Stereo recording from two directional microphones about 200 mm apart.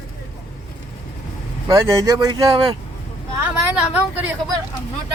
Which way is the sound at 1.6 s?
15° right (ahead or behind).